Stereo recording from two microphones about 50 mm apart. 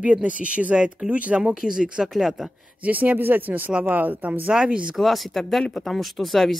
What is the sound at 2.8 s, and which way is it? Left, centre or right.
Speech, right.